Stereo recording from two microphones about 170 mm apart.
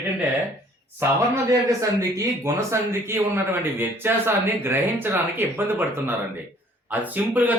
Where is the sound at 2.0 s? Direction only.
20° right (ahead or behind).